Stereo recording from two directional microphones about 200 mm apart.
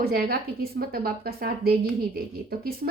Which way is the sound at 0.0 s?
50° right (ahead or behind).